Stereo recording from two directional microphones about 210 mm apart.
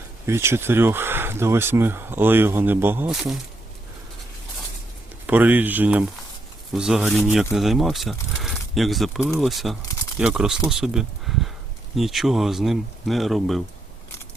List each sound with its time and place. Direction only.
0.3 s speech: 10° right (ahead or behind)
5.2 s speech: 10° right (ahead or behind)